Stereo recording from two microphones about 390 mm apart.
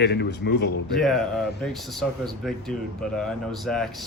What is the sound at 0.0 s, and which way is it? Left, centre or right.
Speech, left.